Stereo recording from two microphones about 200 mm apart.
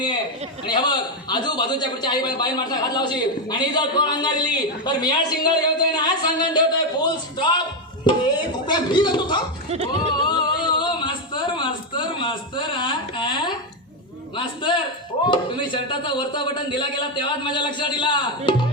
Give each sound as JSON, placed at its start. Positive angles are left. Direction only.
{"t": 0.6, "sound": "a man's voice", "side_deg": 20}
{"t": 9.8, "sound": "a sound", "side_deg": 25}
{"t": 14.3, "sound": "a man's voice", "side_deg": 25}